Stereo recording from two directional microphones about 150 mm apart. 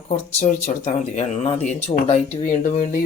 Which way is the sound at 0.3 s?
55° left (ahead or behind).